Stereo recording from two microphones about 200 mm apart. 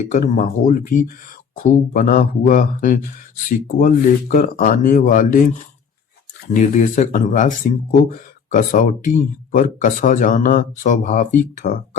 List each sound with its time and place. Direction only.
0.0 s speech: 40° left (ahead or behind)